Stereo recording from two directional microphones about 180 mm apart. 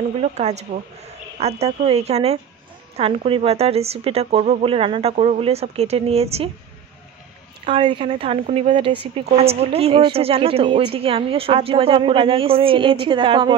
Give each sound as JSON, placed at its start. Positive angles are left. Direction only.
{"t": 0.2, "sound": "speech", "side_deg": -40}
{"t": 7.6, "sound": "speech", "side_deg": -25}